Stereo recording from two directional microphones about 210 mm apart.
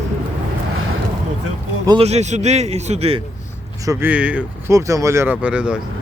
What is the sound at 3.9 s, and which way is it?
Speech, 10° right (ahead or behind).